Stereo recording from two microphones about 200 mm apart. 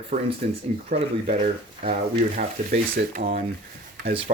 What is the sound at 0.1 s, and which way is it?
Speech, 45° right (ahead or behind).